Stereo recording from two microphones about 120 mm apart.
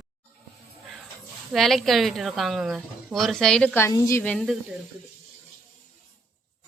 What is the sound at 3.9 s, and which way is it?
Speech, 25° left (ahead or behind).